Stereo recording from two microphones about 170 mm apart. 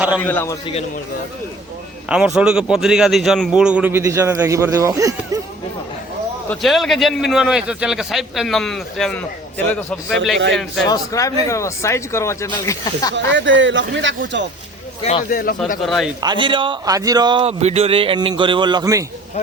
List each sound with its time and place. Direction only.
0.2 s speech: 10° left (ahead or behind)
2.0 s a man's voice: 5° right (ahead or behind)
6.5 s a man's voice: centre (ahead or behind)
10.5 s a man's voice: centre (ahead or behind)
10.8 s speech: 20° left (ahead or behind)
13.1 s speech: 90° right
15.3 s speech: 55° left (ahead or behind)
15.8 s a man's voice: centre (ahead or behind)
16.2 s speech: 30° right (ahead or behind)